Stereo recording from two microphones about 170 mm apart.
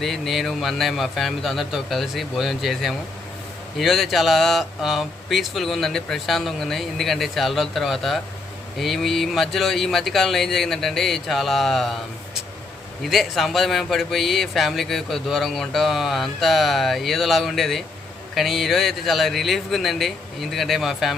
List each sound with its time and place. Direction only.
0.0 s speech: centre (ahead or behind)